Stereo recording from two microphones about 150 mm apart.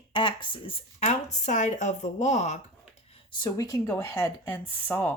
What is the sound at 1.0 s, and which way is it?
Speech, 50° left (ahead or behind).